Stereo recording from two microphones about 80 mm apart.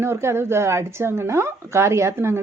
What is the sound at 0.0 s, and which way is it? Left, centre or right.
Speech, right.